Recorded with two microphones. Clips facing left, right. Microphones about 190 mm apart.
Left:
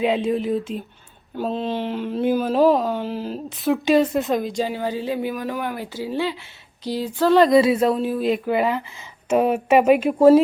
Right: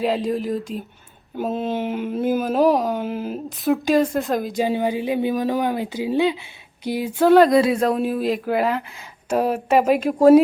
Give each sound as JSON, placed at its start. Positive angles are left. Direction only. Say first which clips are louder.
{"t": 0.3, "sound": "speech", "louder": "left 2 dB", "side_deg": 0}
{"t": 4.6, "sound": "speech", "louder": "right 3 dB", "side_deg": -15}
{"t": 7.4, "sound": "speech", "louder": "left 1 dB", "side_deg": 0}